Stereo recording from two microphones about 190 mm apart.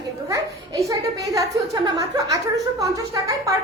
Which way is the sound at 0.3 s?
15° right (ahead or behind).